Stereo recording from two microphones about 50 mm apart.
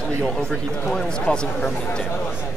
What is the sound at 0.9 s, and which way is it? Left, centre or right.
Speech, left.